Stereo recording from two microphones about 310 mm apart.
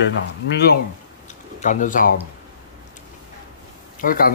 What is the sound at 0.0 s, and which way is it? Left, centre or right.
Speech, left.